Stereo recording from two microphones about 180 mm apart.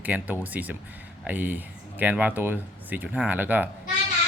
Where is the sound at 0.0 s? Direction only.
10° right (ahead or behind).